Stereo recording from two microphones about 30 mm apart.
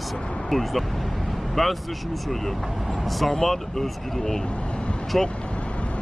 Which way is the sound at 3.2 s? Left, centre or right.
Centre.